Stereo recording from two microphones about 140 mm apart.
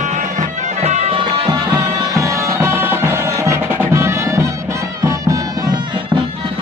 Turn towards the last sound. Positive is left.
turn(degrees=-25)  # may be behind; listen again after turning